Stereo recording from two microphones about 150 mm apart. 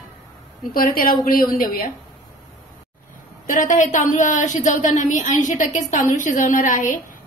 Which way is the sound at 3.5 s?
60° left (ahead or behind).